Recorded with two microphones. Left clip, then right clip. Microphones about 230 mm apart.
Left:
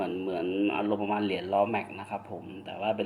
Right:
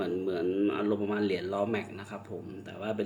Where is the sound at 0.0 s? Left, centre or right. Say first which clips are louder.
Even; centre.